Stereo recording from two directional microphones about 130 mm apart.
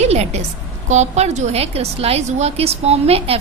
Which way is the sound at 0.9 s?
60° right (ahead or behind).